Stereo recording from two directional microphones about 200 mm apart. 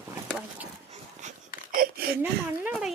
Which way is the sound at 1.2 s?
35° right (ahead or behind).